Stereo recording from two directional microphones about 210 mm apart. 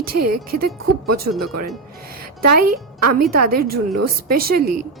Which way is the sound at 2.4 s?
45° right (ahead or behind).